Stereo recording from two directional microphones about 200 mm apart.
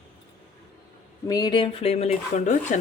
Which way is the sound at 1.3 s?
20° left (ahead or behind).